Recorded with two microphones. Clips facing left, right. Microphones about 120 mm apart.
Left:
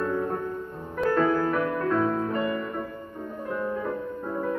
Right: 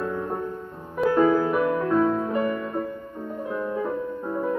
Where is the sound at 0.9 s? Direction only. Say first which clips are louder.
Right 4 dB; 10° right (ahead or behind).